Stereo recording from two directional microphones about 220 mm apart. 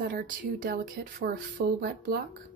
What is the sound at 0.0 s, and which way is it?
Speech, 40° right (ahead or behind).